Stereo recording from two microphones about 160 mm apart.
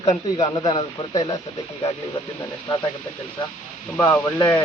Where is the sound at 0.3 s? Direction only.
30° left (ahead or behind).